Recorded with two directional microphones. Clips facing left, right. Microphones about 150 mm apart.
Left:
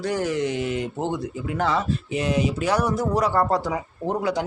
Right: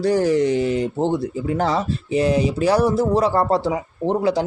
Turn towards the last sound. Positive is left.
turn(degrees=-30)  # may be behind; listen again after turning